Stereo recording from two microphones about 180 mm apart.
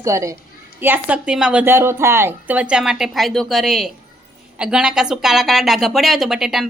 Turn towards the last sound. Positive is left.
turn(degrees=0)  # may be behind; listen again after turning